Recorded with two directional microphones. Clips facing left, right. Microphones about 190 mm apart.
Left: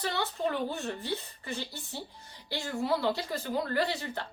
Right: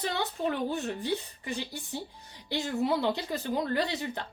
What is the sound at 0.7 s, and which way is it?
A woman's voice, 15° right (ahead or behind).